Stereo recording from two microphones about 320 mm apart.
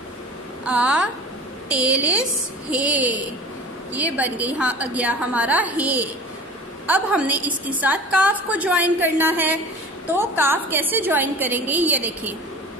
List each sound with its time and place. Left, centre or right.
0.7 s a woman's voice: centre